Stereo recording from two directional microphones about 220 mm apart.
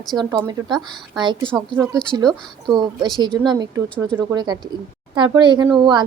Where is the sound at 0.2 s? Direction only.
15° right (ahead or behind).